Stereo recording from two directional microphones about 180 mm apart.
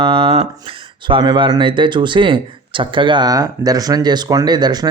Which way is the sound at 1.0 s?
25° right (ahead or behind).